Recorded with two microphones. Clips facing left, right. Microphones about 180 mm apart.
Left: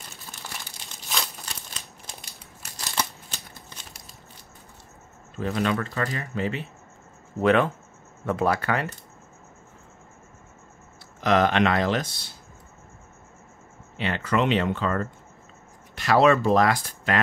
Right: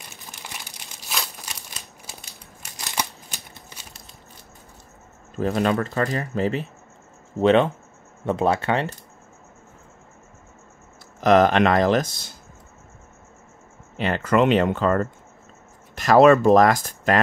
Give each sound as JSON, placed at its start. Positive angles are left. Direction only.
{"t": 0.2, "sound": "crumpling", "side_deg": -15}
{"t": 1.1, "sound": "crumpling", "side_deg": 0}
{"t": 2.1, "sound": "crushing", "side_deg": -5}
{"t": 2.8, "sound": "a sound", "side_deg": -15}
{"t": 5.4, "sound": "speech", "side_deg": -40}
{"t": 7.3, "sound": "speech", "side_deg": -25}
{"t": 11.1, "sound": "speech", "side_deg": -45}
{"t": 13.9, "sound": "speech", "side_deg": -45}